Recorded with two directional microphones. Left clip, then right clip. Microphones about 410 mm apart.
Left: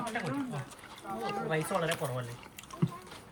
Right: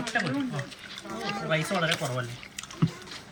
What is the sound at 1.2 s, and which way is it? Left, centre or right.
Speech, centre.